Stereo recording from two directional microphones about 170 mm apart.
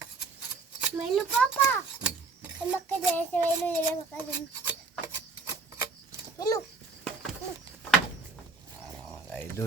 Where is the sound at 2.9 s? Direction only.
10° left (ahead or behind).